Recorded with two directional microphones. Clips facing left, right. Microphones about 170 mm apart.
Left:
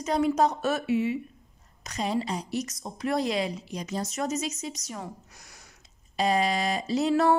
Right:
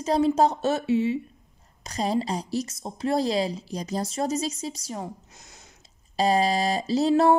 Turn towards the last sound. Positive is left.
turn(degrees=-25)  # may be behind; listen again after turning